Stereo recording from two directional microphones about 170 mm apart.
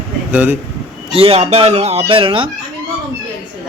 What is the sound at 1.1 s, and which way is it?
Speech, 35° right (ahead or behind).